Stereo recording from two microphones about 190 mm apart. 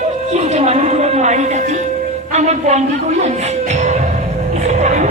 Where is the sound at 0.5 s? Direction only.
35° right (ahead or behind).